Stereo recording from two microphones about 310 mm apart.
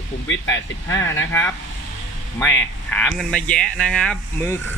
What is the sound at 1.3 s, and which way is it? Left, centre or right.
Speech, centre.